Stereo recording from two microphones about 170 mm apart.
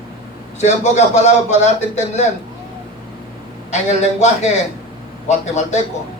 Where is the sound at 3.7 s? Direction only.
40° left (ahead or behind).